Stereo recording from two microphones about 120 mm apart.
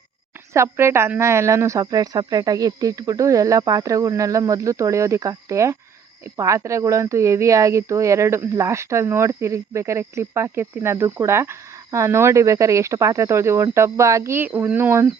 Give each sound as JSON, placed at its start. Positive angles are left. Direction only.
{"t": 0.5, "sound": "speech", "side_deg": -20}